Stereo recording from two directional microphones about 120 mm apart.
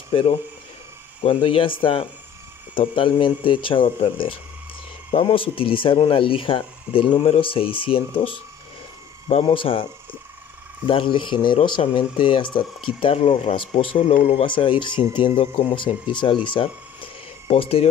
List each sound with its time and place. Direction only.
0.1 s speech: 50° left (ahead or behind)
10.9 s speech: 45° left (ahead or behind)
13.9 s speech: 70° left (ahead or behind)
14.4 s speech: 45° left (ahead or behind)